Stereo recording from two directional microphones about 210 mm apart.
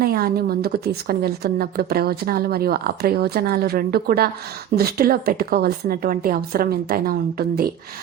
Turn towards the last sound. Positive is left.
turn(degrees=-45)  # may be behind; listen again after turning